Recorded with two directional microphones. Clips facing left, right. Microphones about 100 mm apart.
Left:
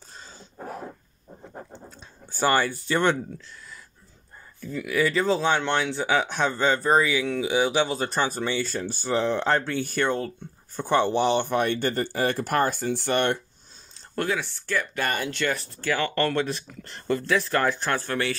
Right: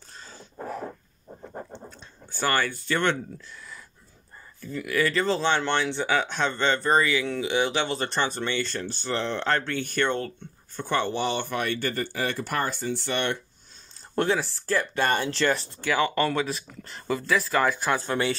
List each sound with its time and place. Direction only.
1.9 s a sound: 15° left (ahead or behind)
4.6 s speech: centre (ahead or behind); by 13.4 s 45° left (ahead or behind)
14.1 s speech: 25° right (ahead or behind)
15.8 s speech: 15° right (ahead or behind)